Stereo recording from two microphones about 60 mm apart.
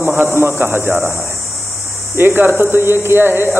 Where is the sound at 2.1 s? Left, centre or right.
Right.